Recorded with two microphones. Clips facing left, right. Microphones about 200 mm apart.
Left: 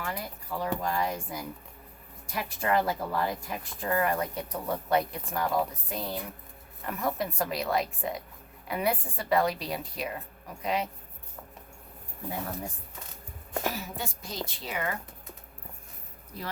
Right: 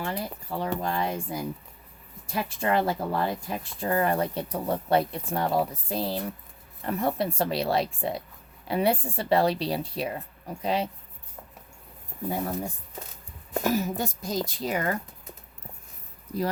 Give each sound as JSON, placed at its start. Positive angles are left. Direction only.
{"t": 0.0, "sound": "speech", "side_deg": -30}
{"t": 13.5, "sound": "speech", "side_deg": -45}